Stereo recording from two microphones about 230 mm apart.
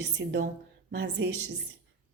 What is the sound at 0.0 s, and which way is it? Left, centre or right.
A woman's voice, right.